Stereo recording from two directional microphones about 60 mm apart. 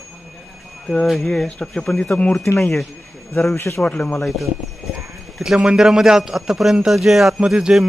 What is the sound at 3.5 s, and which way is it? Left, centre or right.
Speech, left.